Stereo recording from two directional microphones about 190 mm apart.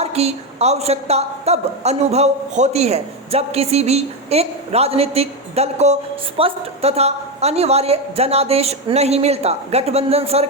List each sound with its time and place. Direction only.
0.0 s a woman's voice: 35° right (ahead or behind)